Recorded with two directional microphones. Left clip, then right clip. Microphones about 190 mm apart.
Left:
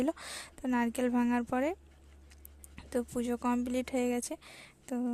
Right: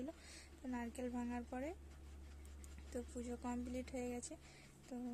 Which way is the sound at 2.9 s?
50° left (ahead or behind).